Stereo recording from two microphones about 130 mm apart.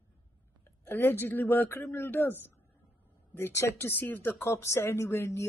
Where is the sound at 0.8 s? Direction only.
15° left (ahead or behind).